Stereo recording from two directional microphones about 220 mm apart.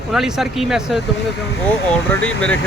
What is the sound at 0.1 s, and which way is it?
Speech, centre (ahead or behind).